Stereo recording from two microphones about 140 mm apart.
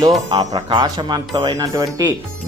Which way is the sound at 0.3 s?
30° right (ahead or behind).